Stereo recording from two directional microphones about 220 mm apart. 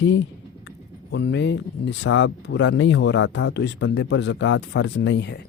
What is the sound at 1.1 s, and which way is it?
Speech, 50° left (ahead or behind).